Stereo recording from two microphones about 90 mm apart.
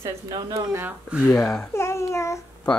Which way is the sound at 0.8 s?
15° right (ahead or behind).